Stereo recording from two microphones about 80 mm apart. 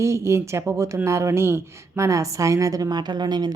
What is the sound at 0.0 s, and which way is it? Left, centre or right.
A woman's voice, right.